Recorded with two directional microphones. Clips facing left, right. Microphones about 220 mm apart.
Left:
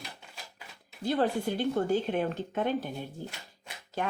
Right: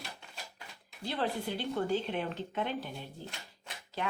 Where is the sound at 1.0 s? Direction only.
50° left (ahead or behind).